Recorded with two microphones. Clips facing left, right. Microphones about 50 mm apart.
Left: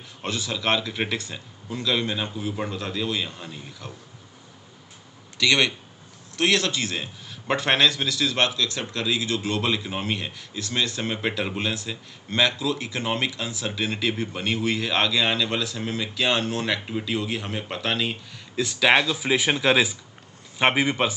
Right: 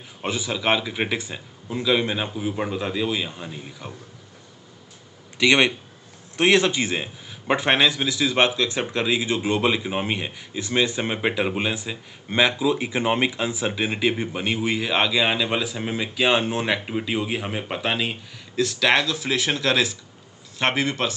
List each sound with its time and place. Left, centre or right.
0.2 s speech: centre
5.4 s a man's voice: right
7.5 s speech: centre
18.6 s speech: centre